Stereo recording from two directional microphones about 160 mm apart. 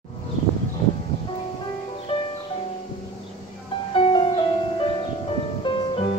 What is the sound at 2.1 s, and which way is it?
Music, 35° left (ahead or behind).